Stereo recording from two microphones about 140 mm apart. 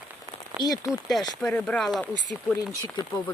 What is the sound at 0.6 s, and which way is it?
Speech, 25° left (ahead or behind).